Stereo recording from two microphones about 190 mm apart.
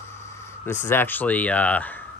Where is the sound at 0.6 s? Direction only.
10° left (ahead or behind).